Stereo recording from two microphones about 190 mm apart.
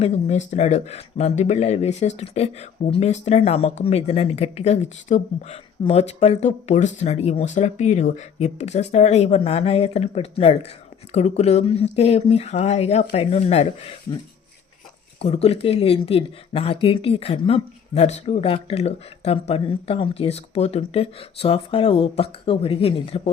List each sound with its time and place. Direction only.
0.0 s speech: 35° left (ahead or behind)
15.2 s speech: 35° left (ahead or behind)